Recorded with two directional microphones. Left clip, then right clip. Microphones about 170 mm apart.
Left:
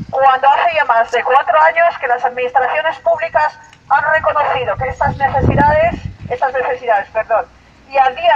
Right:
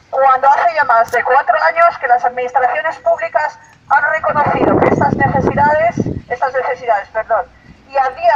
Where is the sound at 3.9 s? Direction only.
Centre (ahead or behind).